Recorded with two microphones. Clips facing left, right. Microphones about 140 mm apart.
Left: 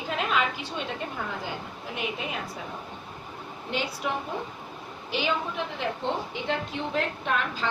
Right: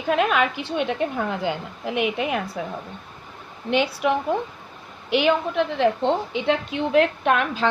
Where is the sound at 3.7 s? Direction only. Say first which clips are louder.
Right 9 dB; 70° right (ahead or behind).